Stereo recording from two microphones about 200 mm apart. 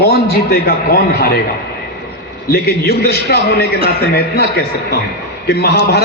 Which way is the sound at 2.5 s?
50° left (ahead or behind).